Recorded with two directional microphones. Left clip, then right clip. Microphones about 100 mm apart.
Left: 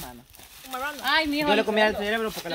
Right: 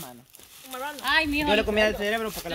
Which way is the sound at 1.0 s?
5° right (ahead or behind).